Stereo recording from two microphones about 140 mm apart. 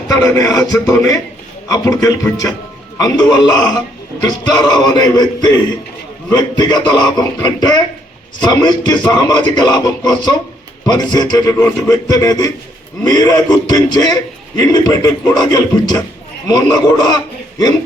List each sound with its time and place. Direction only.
0.1 s a man's voice: 25° left (ahead or behind)